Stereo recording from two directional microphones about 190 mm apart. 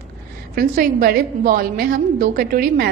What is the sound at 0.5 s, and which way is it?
A woman's voice, 45° right (ahead or behind).